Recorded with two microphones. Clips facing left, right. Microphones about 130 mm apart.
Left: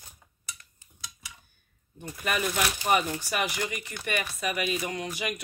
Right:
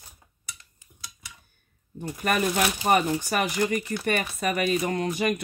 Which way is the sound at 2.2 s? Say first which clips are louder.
Right 4 dB; 45° right (ahead or behind).